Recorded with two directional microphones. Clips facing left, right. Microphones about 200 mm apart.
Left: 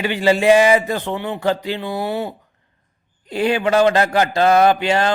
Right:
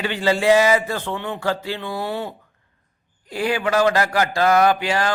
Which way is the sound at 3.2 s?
25° left (ahead or behind).